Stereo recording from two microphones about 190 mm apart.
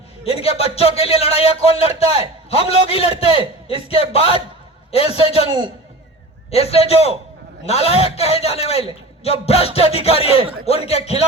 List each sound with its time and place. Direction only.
0.3 s a man's voice: 30° left (ahead or behind)
6.5 s speech: 30° left (ahead or behind)